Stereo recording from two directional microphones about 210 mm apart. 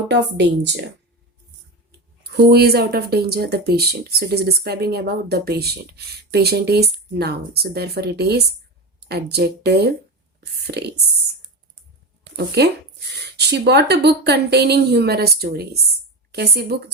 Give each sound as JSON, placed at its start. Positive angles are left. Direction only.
{"t": 0.1, "sound": "a woman's voice", "side_deg": -55}
{"t": 2.2, "sound": "speech", "side_deg": -50}
{"t": 12.5, "sound": "speech", "side_deg": -55}